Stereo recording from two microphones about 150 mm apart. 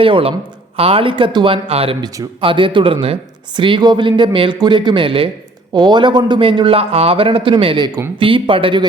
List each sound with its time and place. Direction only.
0.0 s a man's voice: 35° right (ahead or behind)